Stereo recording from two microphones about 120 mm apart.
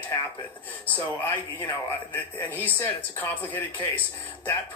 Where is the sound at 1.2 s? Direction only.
15° left (ahead or behind).